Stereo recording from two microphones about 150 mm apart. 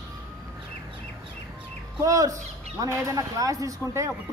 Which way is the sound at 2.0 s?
20° right (ahead or behind).